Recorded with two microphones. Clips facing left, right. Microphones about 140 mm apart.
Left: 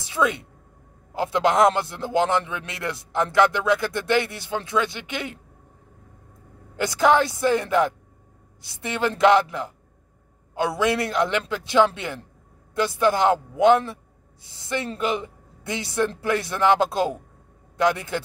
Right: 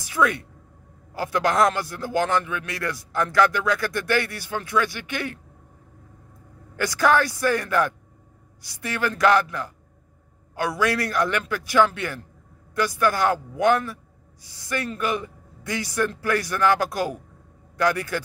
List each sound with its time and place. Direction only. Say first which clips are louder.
0.0 s a woman's voice: even; 20° left (ahead or behind)
6.8 s a man's voice: left 2 dB; 20° left (ahead or behind)